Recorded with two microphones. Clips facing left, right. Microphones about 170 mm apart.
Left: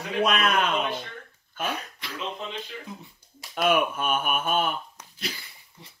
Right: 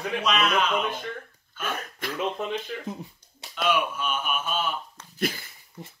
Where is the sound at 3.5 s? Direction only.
50° left (ahead or behind).